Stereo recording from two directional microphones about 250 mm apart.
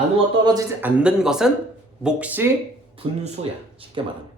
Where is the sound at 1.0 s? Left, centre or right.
Centre.